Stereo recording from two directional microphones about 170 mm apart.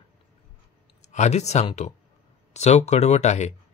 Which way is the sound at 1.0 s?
40° left (ahead or behind).